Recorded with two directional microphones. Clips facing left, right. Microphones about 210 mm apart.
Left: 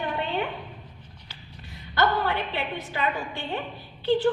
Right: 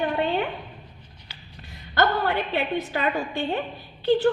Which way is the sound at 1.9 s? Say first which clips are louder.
Right 2 dB; 45° right (ahead or behind).